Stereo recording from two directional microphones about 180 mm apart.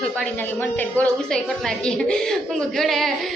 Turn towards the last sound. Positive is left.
turn(degrees=0)  # may be behind; listen again after turning